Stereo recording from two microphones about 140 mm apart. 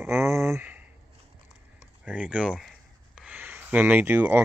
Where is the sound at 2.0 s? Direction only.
10° right (ahead or behind).